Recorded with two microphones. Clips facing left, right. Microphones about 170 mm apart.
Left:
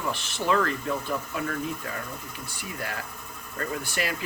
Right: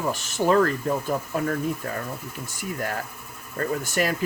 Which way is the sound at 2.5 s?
45° right (ahead or behind).